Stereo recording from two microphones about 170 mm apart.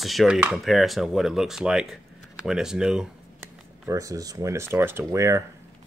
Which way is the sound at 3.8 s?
20° right (ahead or behind).